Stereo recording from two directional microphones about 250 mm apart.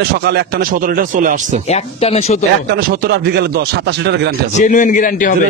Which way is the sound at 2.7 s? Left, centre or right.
Right.